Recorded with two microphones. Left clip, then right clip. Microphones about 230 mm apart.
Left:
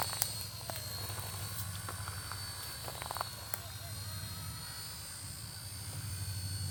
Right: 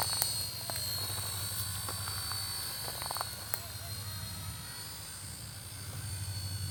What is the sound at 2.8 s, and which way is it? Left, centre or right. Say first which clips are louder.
Frog: even; centre.